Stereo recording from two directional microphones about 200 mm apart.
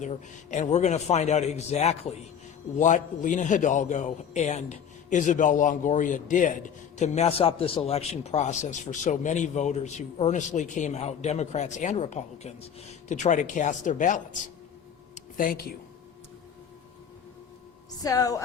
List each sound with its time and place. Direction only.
0.0 s a man's voice: 35° left (ahead or behind)
15.1 s a sound: 45° left (ahead or behind)
18.0 s a woman's voice: 20° left (ahead or behind)